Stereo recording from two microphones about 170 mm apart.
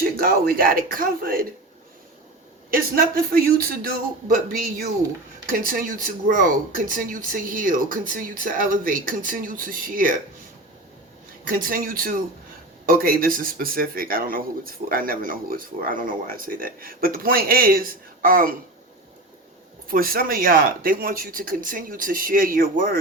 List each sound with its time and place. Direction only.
0.0 s speech: 60° right (ahead or behind)
2.6 s speech: 55° right (ahead or behind)
5.5 s speech: 55° right (ahead or behind)
11.4 s speech: 55° right (ahead or behind)
19.9 s speech: 60° right (ahead or behind)